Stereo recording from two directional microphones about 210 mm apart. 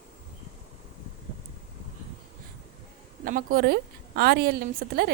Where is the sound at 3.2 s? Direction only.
40° right (ahead or behind).